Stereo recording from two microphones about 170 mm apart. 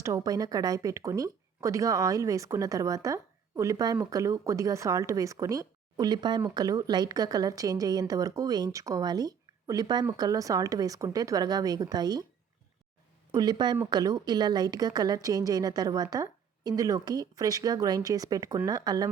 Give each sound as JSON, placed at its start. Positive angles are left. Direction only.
{"t": 0.0, "sound": "speech", "side_deg": -20}
{"t": 13.3, "sound": "speech", "side_deg": -25}